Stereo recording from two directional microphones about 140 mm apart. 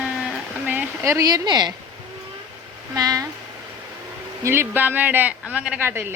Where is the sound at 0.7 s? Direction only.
15° right (ahead or behind).